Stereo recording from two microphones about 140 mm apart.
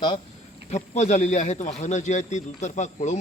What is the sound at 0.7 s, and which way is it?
A man's voice, 55° left (ahead or behind).